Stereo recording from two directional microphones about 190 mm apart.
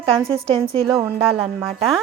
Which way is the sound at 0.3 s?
30° right (ahead or behind).